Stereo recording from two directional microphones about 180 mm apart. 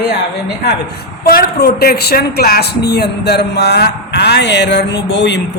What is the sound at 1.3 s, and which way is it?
Speech, 60° left (ahead or behind).